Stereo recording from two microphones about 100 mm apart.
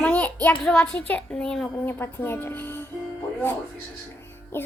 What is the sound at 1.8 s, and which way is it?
Speech, 20° left (ahead or behind).